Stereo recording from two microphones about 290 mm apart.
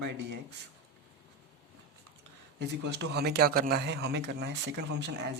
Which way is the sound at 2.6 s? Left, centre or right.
Right.